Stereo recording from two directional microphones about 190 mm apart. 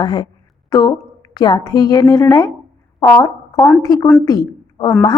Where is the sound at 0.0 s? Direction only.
20° left (ahead or behind).